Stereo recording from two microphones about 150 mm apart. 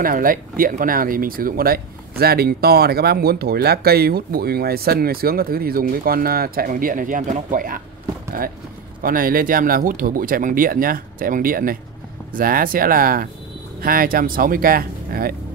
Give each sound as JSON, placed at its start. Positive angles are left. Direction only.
{"t": 0.0, "sound": "speech", "side_deg": -70}
{"t": 9.0, "sound": "speech", "side_deg": -70}